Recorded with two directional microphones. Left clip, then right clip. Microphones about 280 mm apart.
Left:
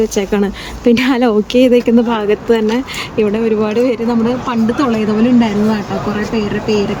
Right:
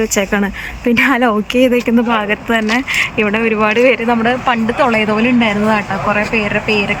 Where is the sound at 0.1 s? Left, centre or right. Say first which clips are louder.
Even; centre.